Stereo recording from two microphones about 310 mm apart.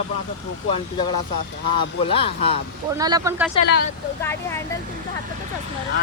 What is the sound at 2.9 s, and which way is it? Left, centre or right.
Speech, centre.